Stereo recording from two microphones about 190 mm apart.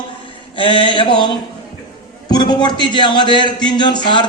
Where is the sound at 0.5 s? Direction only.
25° left (ahead or behind).